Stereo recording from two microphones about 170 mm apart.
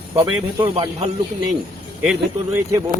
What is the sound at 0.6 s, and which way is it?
Speech, 35° right (ahead or behind).